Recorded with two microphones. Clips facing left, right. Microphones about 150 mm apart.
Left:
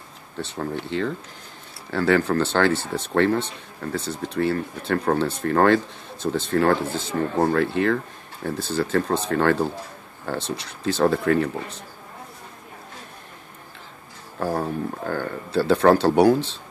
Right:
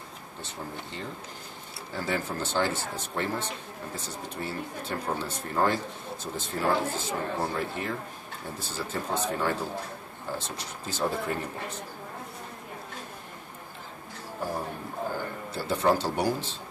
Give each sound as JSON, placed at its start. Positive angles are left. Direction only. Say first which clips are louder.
{"t": 0.4, "sound": "speech", "louder": "left 11 dB", "side_deg": 80}
{"t": 14.4, "sound": "speech", "louder": "left 9 dB", "side_deg": 70}